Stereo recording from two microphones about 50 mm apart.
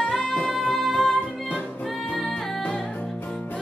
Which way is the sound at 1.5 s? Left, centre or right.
Left.